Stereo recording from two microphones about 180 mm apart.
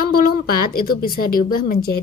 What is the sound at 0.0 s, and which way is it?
Speech, 55° left (ahead or behind).